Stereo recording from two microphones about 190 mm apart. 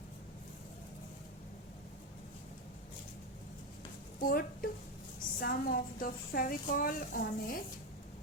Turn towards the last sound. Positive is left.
turn(degrees=50)  # may be behind; listen again after turning